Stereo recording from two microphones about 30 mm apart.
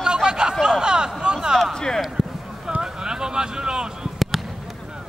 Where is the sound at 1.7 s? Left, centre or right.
Left.